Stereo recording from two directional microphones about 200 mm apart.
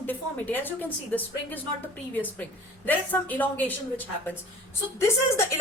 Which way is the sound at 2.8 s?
10° left (ahead or behind).